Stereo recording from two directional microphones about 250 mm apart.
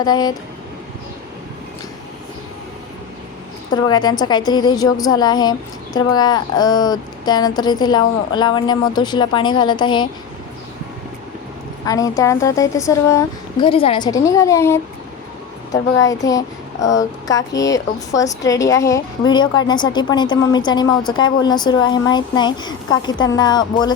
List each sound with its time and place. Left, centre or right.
0.0 s a woman's voice: centre
3.7 s a woman's voice: centre
11.9 s a woman's voice: centre